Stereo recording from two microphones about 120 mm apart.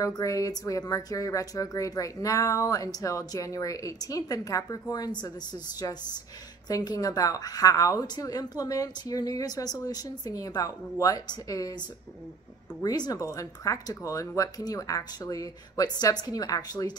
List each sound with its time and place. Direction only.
0.0 s a woman's voice: 30° left (ahead or behind)
12.8 s a woman's voice: 35° left (ahead or behind)